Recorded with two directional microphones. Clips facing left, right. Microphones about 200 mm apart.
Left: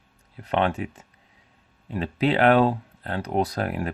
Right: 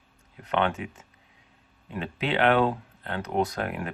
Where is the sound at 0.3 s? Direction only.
35° left (ahead or behind).